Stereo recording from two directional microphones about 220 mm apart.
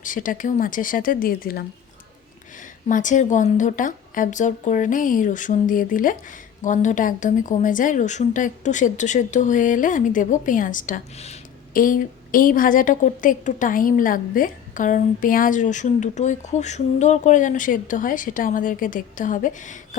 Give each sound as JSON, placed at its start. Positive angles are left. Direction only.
{"t": 0.0, "sound": "a woman's voice", "side_deg": 35}
{"t": 2.9, "sound": "a woman's voice", "side_deg": 35}